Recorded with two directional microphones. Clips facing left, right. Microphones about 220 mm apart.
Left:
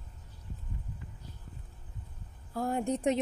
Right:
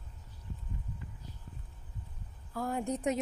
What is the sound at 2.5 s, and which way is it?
Speech, 30° left (ahead or behind).